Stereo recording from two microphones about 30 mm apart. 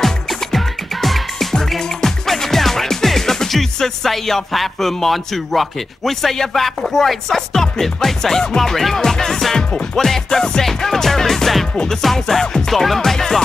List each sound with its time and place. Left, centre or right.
0.0 s music: centre
1.8 s music: centre
11.7 s music: left
12.0 s music: centre